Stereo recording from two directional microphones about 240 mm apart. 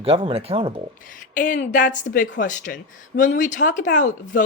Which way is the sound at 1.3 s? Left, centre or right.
Left.